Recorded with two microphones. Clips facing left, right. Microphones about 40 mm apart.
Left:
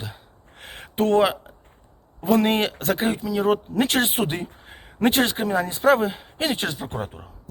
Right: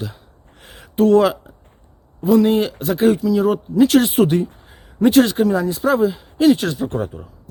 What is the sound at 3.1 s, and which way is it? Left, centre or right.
Speech, centre.